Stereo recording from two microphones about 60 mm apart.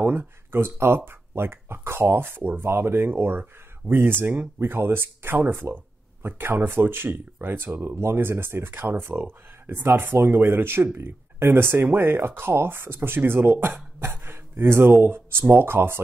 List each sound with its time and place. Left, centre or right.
0.0 s speech: right